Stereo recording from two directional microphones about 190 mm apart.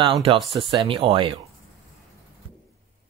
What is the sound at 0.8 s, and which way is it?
Speech, 30° right (ahead or behind).